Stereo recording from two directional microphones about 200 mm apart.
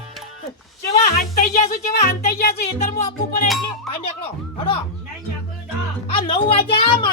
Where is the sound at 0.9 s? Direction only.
40° left (ahead or behind).